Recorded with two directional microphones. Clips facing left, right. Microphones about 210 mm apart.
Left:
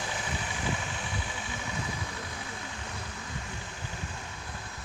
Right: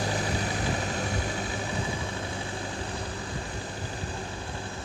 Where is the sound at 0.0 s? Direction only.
40° right (ahead or behind).